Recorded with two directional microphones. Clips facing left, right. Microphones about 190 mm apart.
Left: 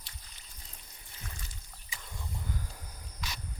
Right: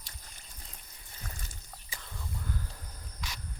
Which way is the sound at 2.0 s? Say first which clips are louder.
Even; 15° left (ahead or behind).